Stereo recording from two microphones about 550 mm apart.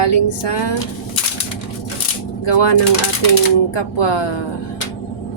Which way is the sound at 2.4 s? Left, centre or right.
Left.